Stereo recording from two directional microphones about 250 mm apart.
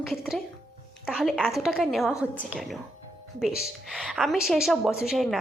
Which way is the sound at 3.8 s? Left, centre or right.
Centre.